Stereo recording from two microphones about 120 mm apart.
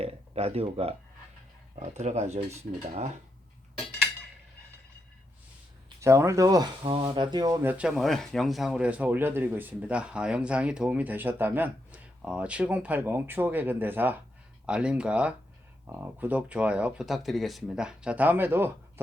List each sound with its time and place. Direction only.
0.0 s speech: 55° right (ahead or behind)
1.8 s speech: 70° right (ahead or behind)
6.0 s speech: 25° right (ahead or behind)
7.6 s speech: 15° right (ahead or behind)
7.9 s speech: centre (ahead or behind); by 18.7 s 15° right (ahead or behind)